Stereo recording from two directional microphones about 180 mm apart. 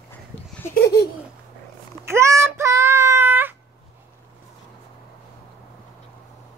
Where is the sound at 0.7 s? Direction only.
60° left (ahead or behind).